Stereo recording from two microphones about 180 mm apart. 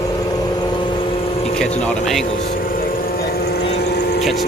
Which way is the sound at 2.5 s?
50° left (ahead or behind).